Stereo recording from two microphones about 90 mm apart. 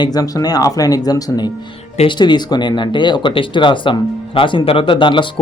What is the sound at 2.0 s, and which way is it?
Speech, 55° left (ahead or behind).